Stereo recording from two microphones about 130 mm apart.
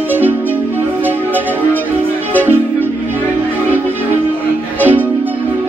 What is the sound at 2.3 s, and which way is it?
Music, 15° right (ahead or behind).